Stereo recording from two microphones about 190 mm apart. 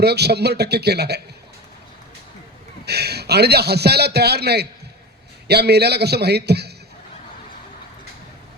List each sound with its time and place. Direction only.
0.0 s a man's voice: 60° right (ahead or behind)
2.8 s a man's voice: 60° right (ahead or behind)